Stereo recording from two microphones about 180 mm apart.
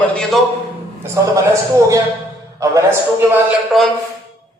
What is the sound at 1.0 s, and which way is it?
A man's voice, 15° right (ahead or behind).